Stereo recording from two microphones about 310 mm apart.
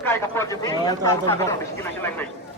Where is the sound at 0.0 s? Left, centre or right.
Centre.